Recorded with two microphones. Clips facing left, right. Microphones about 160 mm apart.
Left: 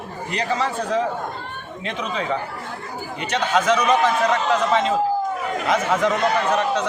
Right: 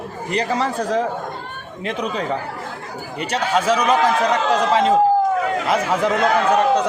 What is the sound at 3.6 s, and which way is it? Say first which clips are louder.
Speech: right 1 dB; 30° right (ahead or behind).